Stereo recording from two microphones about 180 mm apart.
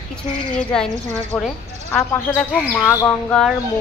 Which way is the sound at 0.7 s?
5° left (ahead or behind).